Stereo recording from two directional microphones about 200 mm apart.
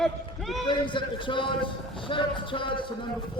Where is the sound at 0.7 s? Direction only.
25° left (ahead or behind).